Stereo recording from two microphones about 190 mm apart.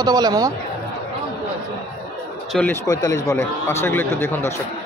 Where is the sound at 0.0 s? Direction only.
20° right (ahead or behind).